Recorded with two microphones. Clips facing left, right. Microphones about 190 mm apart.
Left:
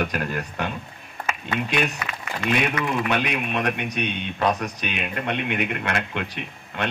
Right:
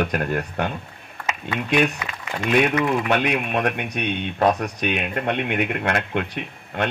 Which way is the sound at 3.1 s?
50° right (ahead or behind).